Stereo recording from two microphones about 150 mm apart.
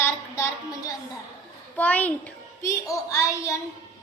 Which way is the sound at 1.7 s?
10° left (ahead or behind).